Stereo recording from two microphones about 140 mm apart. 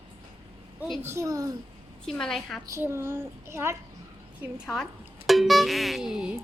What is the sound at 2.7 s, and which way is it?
Child singing, 20° right (ahead or behind).